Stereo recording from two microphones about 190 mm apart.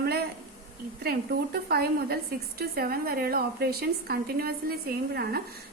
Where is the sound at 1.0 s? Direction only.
55° right (ahead or behind).